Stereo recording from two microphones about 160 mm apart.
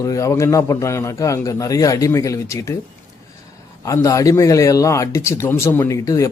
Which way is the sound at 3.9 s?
20° left (ahead or behind).